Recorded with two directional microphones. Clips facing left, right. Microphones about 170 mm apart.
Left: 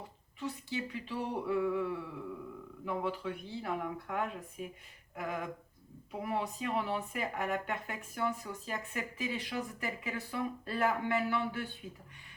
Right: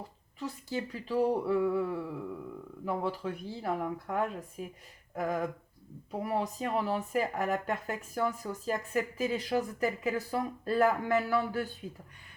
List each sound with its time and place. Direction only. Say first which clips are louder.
0.3 s speech: right 2 dB; 40° right (ahead or behind)